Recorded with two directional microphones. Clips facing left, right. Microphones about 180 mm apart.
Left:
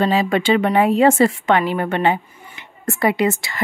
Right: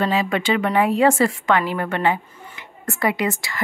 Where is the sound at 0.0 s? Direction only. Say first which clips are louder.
Left 3 dB; 30° left (ahead or behind).